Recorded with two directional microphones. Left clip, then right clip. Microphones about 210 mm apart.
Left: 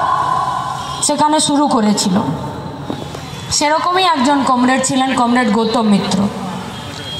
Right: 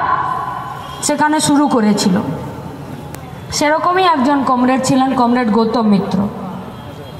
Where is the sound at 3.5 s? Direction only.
20° left (ahead or behind).